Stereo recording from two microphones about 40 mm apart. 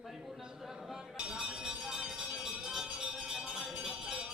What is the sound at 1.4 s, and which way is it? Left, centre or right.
Music, centre.